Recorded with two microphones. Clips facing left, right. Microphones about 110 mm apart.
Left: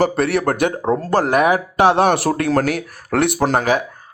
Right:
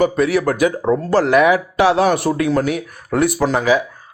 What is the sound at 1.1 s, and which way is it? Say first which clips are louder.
Speech: right 2 dB; 45° left (ahead or behind).